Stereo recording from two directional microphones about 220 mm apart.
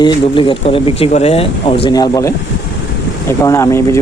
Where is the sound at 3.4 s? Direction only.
15° left (ahead or behind).